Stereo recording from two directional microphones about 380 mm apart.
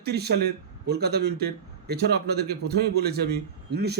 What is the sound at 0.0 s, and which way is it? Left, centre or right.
A man's voice, right.